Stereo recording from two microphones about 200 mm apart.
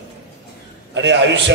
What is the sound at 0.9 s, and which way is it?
Speech, 65° right (ahead or behind).